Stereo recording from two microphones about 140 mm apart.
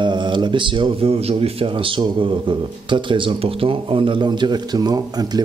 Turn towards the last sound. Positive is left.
turn(degrees=-30)  # may be behind; listen again after turning